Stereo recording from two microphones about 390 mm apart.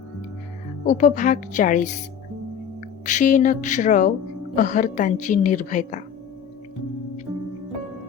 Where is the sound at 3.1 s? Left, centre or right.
Centre.